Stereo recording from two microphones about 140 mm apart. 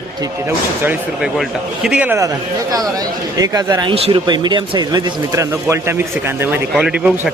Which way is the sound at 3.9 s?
45° right (ahead or behind).